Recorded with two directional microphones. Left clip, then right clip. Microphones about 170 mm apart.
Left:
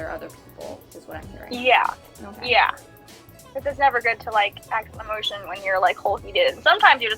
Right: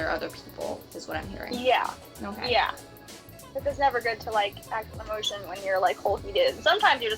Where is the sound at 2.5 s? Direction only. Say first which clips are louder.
Left 7 dB; 35° left (ahead or behind).